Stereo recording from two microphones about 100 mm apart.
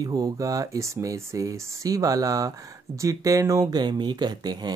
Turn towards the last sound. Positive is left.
turn(degrees=-45)  # may be behind; listen again after turning